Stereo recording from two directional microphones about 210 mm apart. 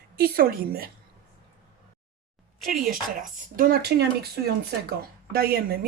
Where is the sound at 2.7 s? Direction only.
45° right (ahead or behind).